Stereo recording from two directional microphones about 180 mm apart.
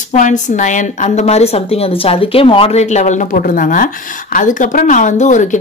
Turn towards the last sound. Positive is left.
turn(degrees=45)  # may be behind; listen again after turning